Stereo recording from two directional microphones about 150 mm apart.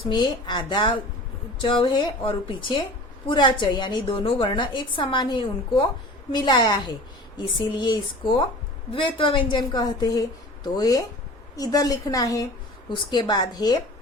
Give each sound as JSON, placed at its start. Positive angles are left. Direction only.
{"t": 0.1, "sound": "a woman's voice", "side_deg": 30}